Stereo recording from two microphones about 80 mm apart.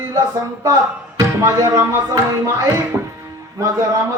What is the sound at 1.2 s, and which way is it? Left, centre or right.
Music, right.